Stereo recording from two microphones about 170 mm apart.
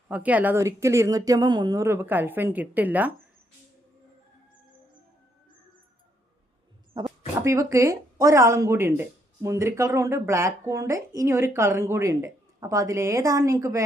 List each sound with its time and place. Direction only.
0.1 s speech: 10° right (ahead or behind)
7.0 s speech: 20° right (ahead or behind)